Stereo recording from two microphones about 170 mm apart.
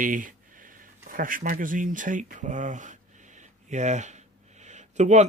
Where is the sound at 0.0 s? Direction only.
50° right (ahead or behind).